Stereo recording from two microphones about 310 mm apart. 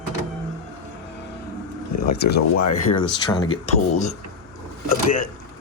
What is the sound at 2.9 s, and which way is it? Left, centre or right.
Speech, centre.